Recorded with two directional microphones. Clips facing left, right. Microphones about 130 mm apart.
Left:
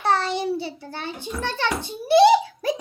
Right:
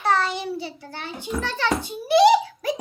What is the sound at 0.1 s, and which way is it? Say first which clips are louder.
Child singing: even; 35° left (ahead or behind).